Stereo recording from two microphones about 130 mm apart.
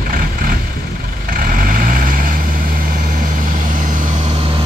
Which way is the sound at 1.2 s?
90° right.